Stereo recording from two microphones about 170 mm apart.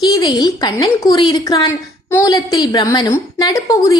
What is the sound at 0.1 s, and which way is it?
A woman's voice, 25° left (ahead or behind).